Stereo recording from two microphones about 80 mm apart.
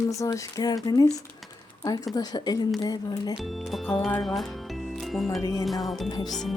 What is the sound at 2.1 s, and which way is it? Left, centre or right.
Speech, left.